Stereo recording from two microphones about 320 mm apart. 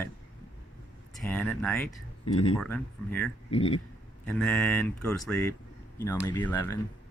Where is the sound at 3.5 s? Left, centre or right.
Centre.